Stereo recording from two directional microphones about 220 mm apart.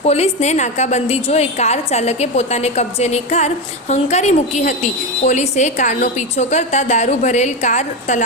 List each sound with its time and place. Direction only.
0.0 s a woman's voice: 30° left (ahead or behind)